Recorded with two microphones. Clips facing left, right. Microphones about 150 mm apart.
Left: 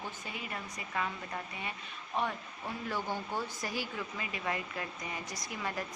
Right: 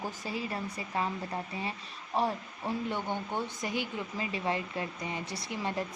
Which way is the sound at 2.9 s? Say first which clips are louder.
Right 2 dB; 20° right (ahead or behind).